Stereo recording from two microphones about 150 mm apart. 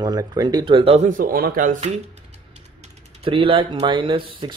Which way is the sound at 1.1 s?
75° right (ahead or behind).